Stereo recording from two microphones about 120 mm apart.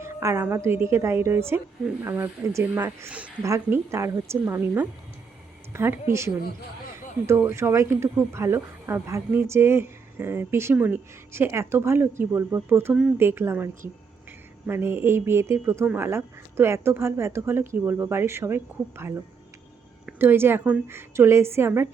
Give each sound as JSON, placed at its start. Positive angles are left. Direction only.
{"t": 0.0, "sound": "a sound", "side_deg": -25}
{"t": 0.4, "sound": "speech", "side_deg": -20}
{"t": 14.7, "sound": "speech", "side_deg": -20}